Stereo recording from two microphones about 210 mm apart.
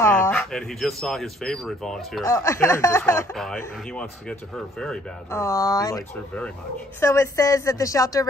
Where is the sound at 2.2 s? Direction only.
15° left (ahead or behind).